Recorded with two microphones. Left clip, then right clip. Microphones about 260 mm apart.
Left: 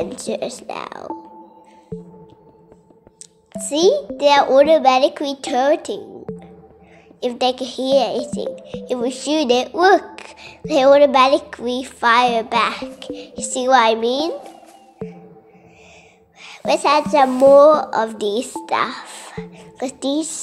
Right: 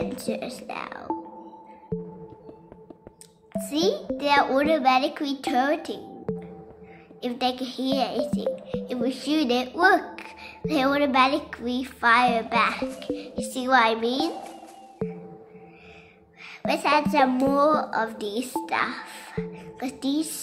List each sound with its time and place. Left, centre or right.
0.0 s a child's voice: centre
3.5 s a child's voice: centre
6.3 s music: centre
7.2 s a child's voice: centre
14.3 s a sound: centre
16.4 s a child's voice: centre